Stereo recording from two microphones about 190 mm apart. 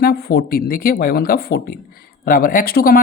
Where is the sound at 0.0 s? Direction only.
55° left (ahead or behind).